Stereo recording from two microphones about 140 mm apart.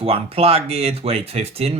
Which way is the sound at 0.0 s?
45° right (ahead or behind).